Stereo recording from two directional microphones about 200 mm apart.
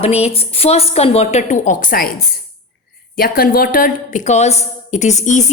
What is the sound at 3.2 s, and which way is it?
A woman's voice, 50° left (ahead or behind).